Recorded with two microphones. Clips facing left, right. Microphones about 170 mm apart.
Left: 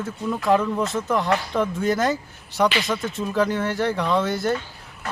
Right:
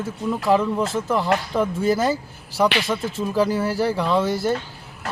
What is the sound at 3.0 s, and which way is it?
Speech, 30° right (ahead or behind).